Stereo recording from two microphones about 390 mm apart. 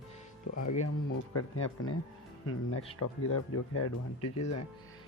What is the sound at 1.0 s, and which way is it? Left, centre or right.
Speech, left.